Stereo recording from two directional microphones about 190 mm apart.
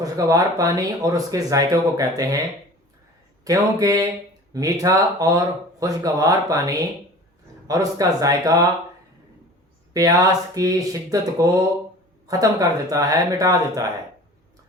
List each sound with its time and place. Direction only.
0.0 s speech: 20° right (ahead or behind)
3.4 s speech: 20° right (ahead or behind)
9.9 s speech: 20° right (ahead or behind)